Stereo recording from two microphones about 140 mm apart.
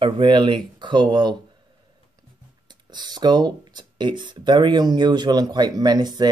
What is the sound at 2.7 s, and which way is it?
Speech, 30° right (ahead or behind).